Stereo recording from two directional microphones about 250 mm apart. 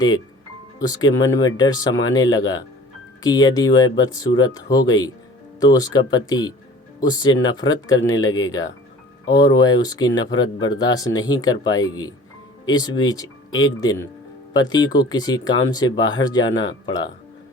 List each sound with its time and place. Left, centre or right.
0.8 s speech: centre